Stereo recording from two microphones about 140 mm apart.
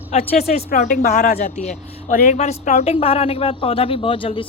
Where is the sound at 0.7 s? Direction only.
80° left.